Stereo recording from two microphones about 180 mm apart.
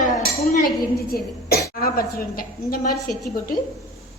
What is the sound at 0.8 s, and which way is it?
A woman's voice, 55° left (ahead or behind).